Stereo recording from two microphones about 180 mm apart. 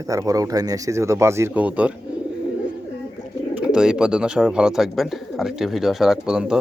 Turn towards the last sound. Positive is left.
turn(degrees=-5)  # may be behind; listen again after turning